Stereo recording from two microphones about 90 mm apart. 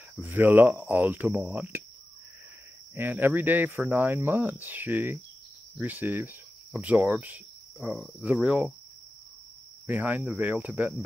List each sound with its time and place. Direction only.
0.1 s speech: 20° right (ahead or behind)
2.9 s speech: 25° right (ahead or behind)
8.4 s cricket: 10° right (ahead or behind)
9.8 s cricket: 20° right (ahead or behind)